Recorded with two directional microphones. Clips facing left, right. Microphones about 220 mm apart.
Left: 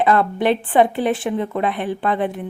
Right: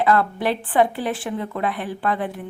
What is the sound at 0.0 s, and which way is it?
A woman's voice, 20° left (ahead or behind).